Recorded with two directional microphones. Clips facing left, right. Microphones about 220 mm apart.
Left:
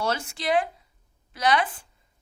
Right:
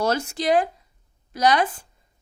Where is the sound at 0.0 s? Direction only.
40° right (ahead or behind).